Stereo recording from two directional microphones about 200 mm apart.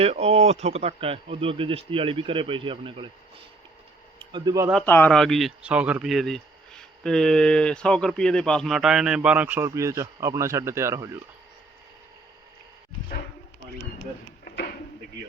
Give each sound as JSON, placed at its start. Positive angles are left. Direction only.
{"t": 0.0, "sound": "speech", "side_deg": -30}
{"t": 4.2, "sound": "speech", "side_deg": -25}
{"t": 4.9, "sound": "speech", "side_deg": 10}
{"t": 14.4, "sound": "a sound", "side_deg": 55}